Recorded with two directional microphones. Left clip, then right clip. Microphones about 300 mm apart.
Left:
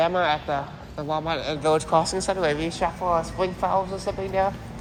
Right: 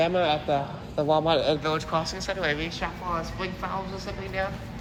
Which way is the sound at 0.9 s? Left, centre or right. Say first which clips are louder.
Right 4 dB; centre.